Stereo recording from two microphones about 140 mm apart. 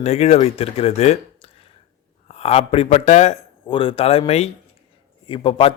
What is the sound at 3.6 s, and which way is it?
A man's voice, 40° left (ahead or behind).